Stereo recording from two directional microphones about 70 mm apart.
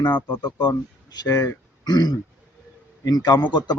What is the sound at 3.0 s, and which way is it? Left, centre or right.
Speech, left.